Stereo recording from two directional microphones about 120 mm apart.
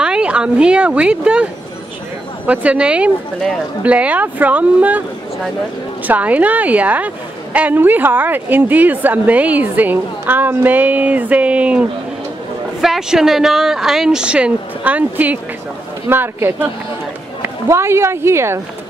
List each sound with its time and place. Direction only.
0.0 s a woman's voice: 10° right (ahead or behind)
6.0 s a woman's voice: 10° right (ahead or behind)